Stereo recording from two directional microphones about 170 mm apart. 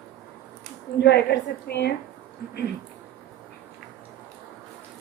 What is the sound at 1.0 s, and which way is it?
Speech, 75° left (ahead or behind).